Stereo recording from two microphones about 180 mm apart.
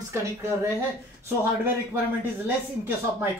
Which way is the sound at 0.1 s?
15° right (ahead or behind).